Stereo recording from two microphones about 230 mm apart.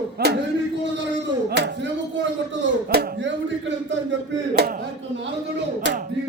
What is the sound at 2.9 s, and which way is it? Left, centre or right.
Speech, right.